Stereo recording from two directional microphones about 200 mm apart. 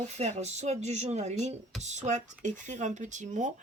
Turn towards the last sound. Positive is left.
turn(degrees=-35)  # may be behind; listen again after turning